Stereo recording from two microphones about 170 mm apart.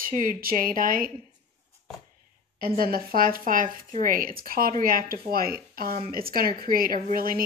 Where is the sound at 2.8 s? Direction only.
60° right (ahead or behind).